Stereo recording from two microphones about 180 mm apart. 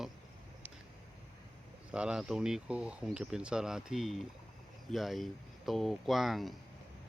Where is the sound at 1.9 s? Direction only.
5° right (ahead or behind).